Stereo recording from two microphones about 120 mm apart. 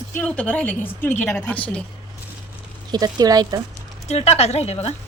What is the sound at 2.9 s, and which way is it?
Speech, 35° right (ahead or behind).